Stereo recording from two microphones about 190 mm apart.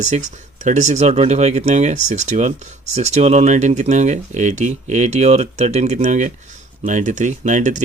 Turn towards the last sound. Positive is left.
turn(degrees=-40)  # may be behind; listen again after turning